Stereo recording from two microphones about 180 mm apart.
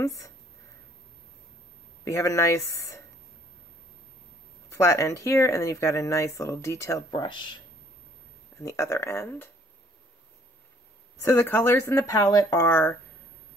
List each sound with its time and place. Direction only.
0.0 s speech: 15° left (ahead or behind)
2.0 s speech: 15° left (ahead or behind)
4.6 s speech: 15° left (ahead or behind)
7.1 s speech: 25° left (ahead or behind)
11.2 s speech: 10° left (ahead or behind)